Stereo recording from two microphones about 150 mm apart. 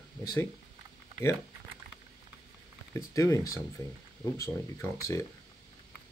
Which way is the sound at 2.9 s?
20° left (ahead or behind).